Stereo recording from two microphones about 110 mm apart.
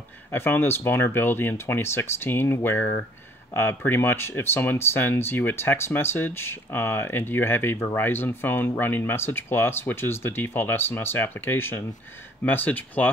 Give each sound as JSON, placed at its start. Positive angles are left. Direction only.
{"t": 0.3, "sound": "speech", "side_deg": 20}